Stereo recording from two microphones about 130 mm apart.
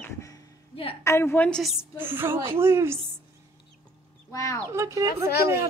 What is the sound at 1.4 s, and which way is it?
Speech, 5° left (ahead or behind).